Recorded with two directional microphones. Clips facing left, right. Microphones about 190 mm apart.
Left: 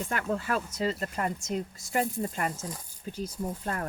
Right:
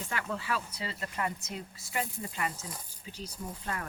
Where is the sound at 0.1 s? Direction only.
50° left (ahead or behind).